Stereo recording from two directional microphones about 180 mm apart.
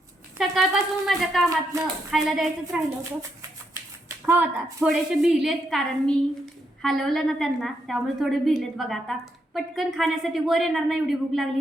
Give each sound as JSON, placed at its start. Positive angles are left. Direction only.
{"t": 0.3, "sound": "a woman's voice", "side_deg": 0}
{"t": 1.7, "sound": "speech", "side_deg": -15}
{"t": 2.0, "sound": "a woman's voice", "side_deg": 0}
{"t": 4.3, "sound": "a woman's voice", "side_deg": -10}